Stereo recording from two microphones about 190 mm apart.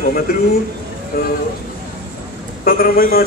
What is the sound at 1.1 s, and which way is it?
Speech, 50° left (ahead or behind).